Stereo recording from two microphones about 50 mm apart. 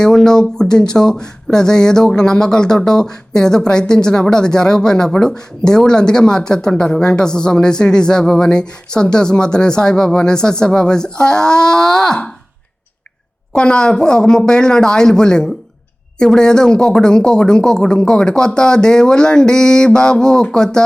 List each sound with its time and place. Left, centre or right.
0.0 s speech: centre
13.5 s speech: centre